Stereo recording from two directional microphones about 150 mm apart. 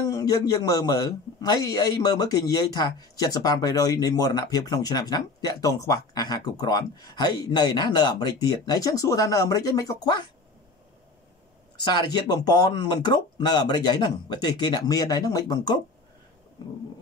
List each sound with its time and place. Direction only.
0.0 s a man's voice: 25° left (ahead or behind)
11.7 s a man's voice: 30° left (ahead or behind)